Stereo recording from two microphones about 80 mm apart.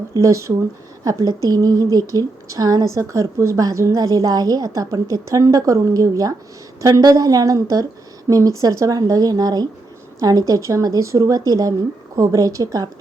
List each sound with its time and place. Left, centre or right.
0.1 s speech: right